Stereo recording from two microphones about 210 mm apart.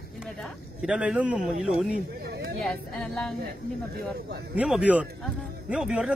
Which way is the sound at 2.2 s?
50° right (ahead or behind).